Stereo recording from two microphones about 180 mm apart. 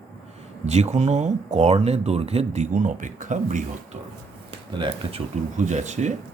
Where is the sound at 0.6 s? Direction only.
40° right (ahead or behind).